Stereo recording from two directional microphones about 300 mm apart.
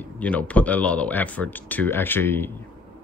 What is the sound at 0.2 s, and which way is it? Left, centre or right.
Speech, centre.